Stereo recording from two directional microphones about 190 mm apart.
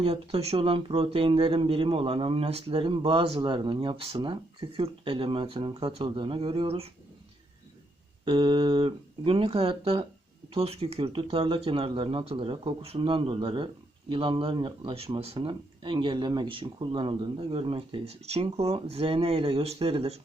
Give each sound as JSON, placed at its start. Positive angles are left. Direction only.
{"t": 0.0, "sound": "speech", "side_deg": -30}
{"t": 8.2, "sound": "speech", "side_deg": -25}